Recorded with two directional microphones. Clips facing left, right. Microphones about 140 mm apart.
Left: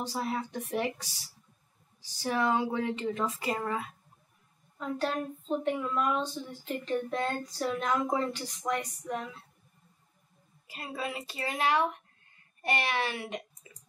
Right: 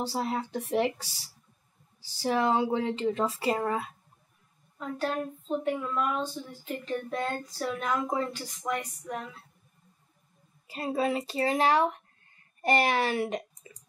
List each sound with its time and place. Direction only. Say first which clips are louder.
0.0 s speech: right 3 dB; 35° right (ahead or behind)
4.7 s a woman's voice: even; 5° right (ahead or behind)
10.7 s speech: right 9 dB; 35° right (ahead or behind)